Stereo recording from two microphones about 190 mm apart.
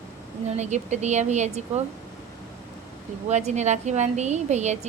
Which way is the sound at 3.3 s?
35° right (ahead or behind).